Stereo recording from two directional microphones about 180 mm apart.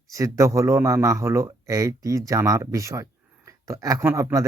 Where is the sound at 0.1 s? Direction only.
15° right (ahead or behind).